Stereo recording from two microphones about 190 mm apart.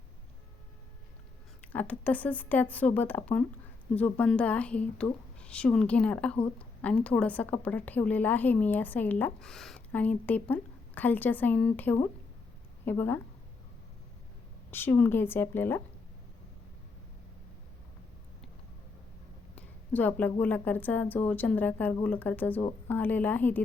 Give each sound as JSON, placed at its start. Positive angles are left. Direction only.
{"t": 1.6, "sound": "a woman's voice", "side_deg": 10}
{"t": 14.7, "sound": "a woman's voice", "side_deg": 10}
{"t": 19.5, "sound": "a sound", "side_deg": 10}
{"t": 20.4, "sound": "a woman's voice", "side_deg": 10}